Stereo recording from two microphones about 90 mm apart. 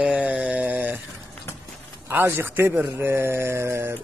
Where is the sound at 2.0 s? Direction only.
25° right (ahead or behind).